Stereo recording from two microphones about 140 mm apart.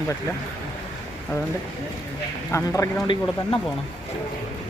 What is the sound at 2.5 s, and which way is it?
Speech, 20° left (ahead or behind).